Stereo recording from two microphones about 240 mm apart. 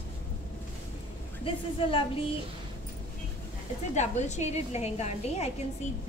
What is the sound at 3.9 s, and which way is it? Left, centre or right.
A woman's voice, left.